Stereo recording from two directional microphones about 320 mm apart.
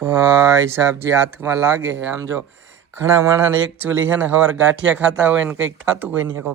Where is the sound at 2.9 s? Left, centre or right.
Centre.